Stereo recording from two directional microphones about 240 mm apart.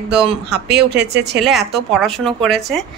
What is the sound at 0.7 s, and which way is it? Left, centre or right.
Speech, right.